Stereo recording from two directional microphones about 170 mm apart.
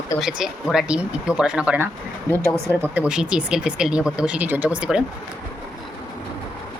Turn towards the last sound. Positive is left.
turn(degrees=-5)  # may be behind; listen again after turning